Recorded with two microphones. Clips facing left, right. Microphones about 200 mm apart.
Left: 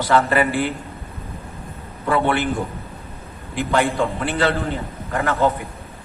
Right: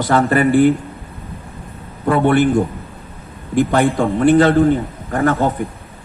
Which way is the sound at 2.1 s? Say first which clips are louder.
Right 7 dB; 50° right (ahead or behind).